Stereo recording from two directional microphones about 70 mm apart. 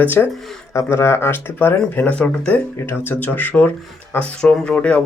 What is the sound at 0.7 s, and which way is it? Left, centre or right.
Speech, left.